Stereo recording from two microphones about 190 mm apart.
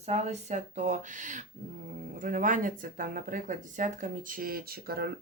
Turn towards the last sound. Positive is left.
turn(degrees=-55)  # may be behind; listen again after turning